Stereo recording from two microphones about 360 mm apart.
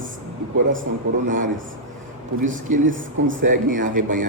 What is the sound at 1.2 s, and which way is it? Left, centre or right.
Speech, right.